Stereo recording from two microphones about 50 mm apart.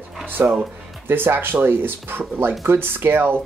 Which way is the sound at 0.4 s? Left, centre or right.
Right.